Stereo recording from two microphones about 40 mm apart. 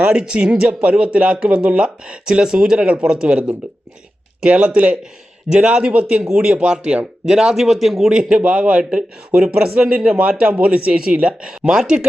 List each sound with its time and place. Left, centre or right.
0.1 s a man's voice: right
0.6 s a man's voice: right
4.4 s a man's voice: right; by 8.1 s centre
8.1 s a man's voice: centre
8.4 s a man's voice: right